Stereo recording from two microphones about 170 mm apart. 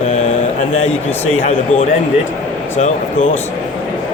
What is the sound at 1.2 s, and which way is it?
Speech, 40° left (ahead or behind).